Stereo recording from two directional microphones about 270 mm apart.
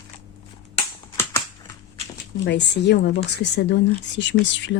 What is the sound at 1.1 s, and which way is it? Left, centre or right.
Typing, centre.